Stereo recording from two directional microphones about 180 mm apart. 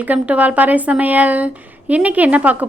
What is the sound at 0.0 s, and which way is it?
A woman's voice, 10° right (ahead or behind).